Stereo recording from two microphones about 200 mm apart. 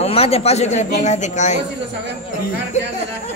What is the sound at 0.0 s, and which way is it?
A man's voice, 30° left (ahead or behind).